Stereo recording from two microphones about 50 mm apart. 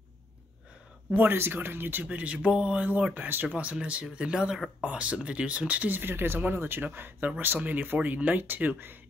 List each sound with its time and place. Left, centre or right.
1.1 s speech: right
2.0 s speech: right
3.2 s speech: right
3.4 s speech: right
5.9 s speech: right